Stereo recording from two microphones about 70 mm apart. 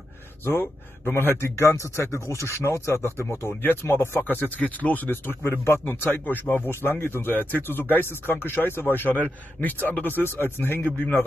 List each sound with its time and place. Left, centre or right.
0.5 s a man's voice: left